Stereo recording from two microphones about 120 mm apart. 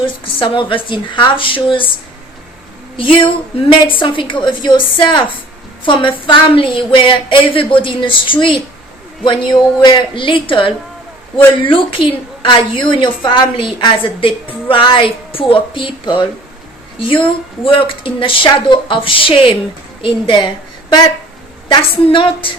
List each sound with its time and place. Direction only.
0.0 s speech: 45° left (ahead or behind)
3.0 s speech: 45° left (ahead or behind)
22.0 s speech: 45° left (ahead or behind)